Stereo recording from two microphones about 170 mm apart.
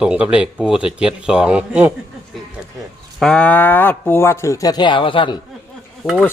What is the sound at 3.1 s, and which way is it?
Speech, 5° left (ahead or behind).